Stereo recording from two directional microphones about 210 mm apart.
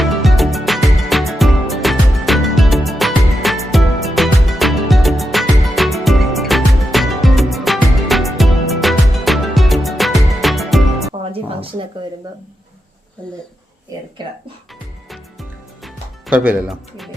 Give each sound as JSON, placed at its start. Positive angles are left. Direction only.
{"t": 0.0, "sound": "music", "side_deg": 0}
{"t": 11.2, "sound": "music", "side_deg": -25}
{"t": 15.1, "sound": "music", "side_deg": 0}